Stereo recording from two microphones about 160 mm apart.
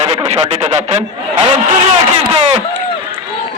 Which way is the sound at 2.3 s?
30° right (ahead or behind).